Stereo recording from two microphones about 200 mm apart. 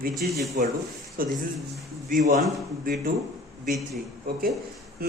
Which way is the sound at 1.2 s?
45° right (ahead or behind).